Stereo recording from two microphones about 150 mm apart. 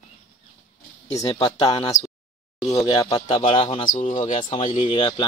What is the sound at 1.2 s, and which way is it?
Speech, 25° left (ahead or behind).